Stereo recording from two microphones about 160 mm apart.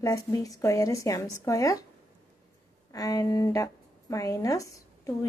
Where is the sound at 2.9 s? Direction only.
20° left (ahead or behind).